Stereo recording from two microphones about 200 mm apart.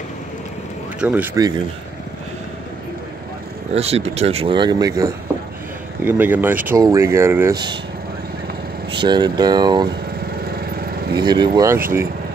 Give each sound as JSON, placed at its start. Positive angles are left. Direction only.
{"t": 1.0, "sound": "speech", "side_deg": -10}
{"t": 3.7, "sound": "speech", "side_deg": -30}
{"t": 8.9, "sound": "speech", "side_deg": -20}
{"t": 11.1, "sound": "speech", "side_deg": -20}